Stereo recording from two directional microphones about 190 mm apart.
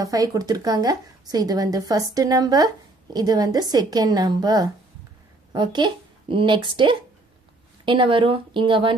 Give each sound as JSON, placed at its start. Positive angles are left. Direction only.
{"t": 0.0, "sound": "speech", "side_deg": -20}